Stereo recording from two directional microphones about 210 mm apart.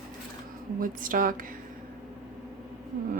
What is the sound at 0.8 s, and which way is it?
Speech, 40° right (ahead or behind).